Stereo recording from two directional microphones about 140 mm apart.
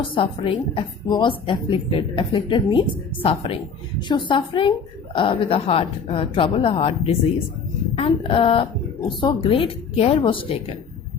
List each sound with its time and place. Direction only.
0.1 s a woman's voice: 40° left (ahead or behind)